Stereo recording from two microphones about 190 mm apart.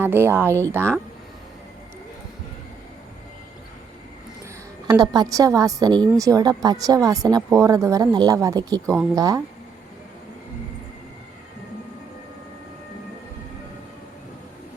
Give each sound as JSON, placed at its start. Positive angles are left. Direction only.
{"t": 0.0, "sound": "speech", "side_deg": -10}
{"t": 4.9, "sound": "speech", "side_deg": -20}